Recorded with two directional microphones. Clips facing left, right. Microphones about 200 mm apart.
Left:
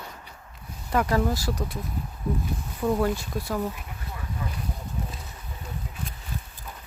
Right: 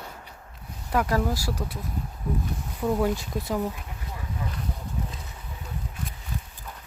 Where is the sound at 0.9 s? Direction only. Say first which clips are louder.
Left 1 dB; centre (ahead or behind).